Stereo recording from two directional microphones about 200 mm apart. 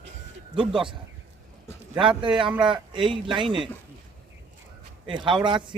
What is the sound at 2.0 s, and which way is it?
Speech, 25° right (ahead or behind).